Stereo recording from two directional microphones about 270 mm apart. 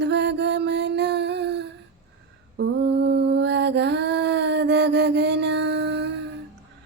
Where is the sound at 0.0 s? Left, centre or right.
Right.